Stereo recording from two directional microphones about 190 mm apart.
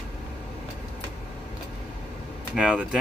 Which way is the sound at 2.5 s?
5° right (ahead or behind).